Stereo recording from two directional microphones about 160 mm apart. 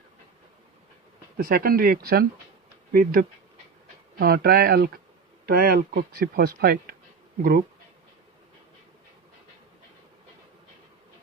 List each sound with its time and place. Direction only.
1.4 s speech: 70° right (ahead or behind)
4.2 s speech: 75° right (ahead or behind)